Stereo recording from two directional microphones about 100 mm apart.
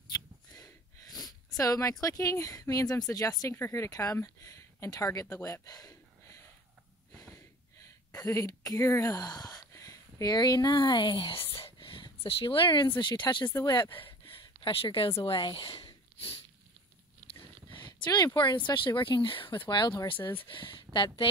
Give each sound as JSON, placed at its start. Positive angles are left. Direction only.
{"t": 0.5, "sound": "speech", "side_deg": 40}
{"t": 3.5, "sound": "speech", "side_deg": 25}
{"t": 7.3, "sound": "a sound", "side_deg": 35}
{"t": 13.0, "sound": "speech", "side_deg": 50}
{"t": 14.2, "sound": "a sound", "side_deg": 60}
{"t": 15.2, "sound": "speech", "side_deg": 55}
{"t": 17.9, "sound": "a woman's voice", "side_deg": 45}